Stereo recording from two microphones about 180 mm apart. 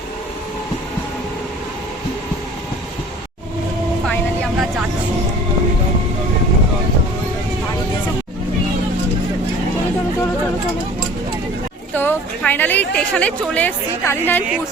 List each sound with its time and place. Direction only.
11.9 s a woman's voice: 10° left (ahead or behind)